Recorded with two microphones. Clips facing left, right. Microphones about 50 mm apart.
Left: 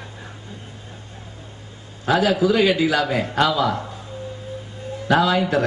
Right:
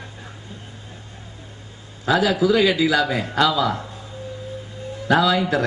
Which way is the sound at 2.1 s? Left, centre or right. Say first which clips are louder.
Even; left.